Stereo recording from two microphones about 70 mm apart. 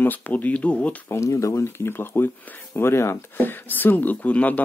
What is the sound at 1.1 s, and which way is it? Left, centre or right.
Speech, left.